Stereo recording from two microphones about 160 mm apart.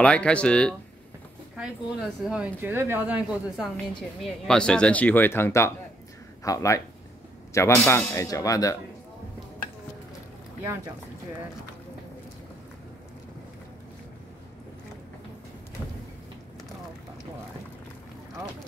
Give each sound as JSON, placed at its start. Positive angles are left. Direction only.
{"t": 0.0, "sound": "a man's voice", "side_deg": 5}